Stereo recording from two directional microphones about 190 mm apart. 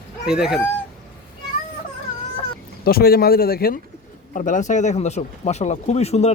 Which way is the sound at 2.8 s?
55° left (ahead or behind).